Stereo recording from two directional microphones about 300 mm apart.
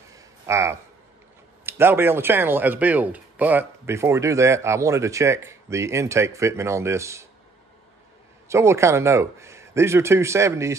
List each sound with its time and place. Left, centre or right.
0.1 s a sound: centre
1.7 s speech: centre
8.5 s speech: centre